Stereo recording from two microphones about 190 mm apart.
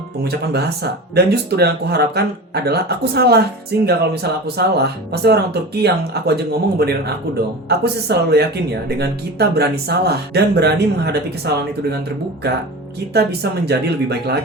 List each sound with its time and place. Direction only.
0.3 s speech: 60° right (ahead or behind)